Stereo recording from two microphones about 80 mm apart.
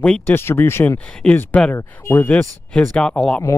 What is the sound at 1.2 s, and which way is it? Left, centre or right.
Speech, centre.